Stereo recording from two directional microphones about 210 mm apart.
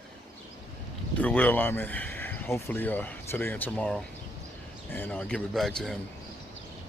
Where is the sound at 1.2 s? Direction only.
10° left (ahead or behind).